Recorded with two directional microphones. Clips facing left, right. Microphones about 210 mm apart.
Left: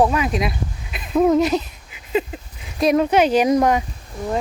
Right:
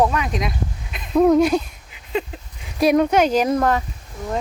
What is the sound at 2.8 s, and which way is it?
Speech, centre (ahead or behind).